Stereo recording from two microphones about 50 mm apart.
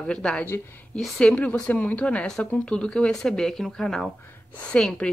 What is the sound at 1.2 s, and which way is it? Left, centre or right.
A woman's voice, left.